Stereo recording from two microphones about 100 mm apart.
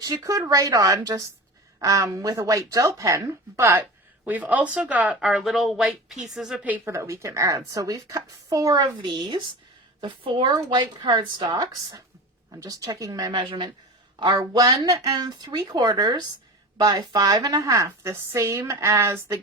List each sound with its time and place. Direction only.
0.0 s a woman's voice: 35° right (ahead or behind)
4.3 s speech: 15° right (ahead or behind)
5.2 s speech: centre (ahead or behind)
6.8 s a woman's voice: 30° right (ahead or behind)
9.0 s speech: 50° right (ahead or behind)
11.4 s a woman's voice: 40° right (ahead or behind)
13.4 s a man's voice: 55° right (ahead or behind)
14.2 s speech: 45° right (ahead or behind)
15.1 s a woman's voice: 45° right (ahead or behind)
17.8 s speech: 25° right (ahead or behind)